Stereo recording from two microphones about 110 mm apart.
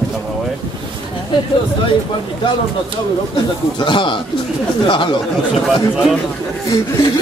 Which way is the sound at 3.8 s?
50° left (ahead or behind).